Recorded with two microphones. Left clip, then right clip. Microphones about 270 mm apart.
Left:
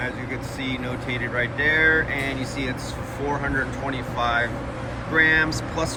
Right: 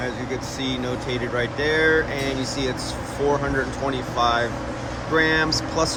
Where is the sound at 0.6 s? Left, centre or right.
Centre.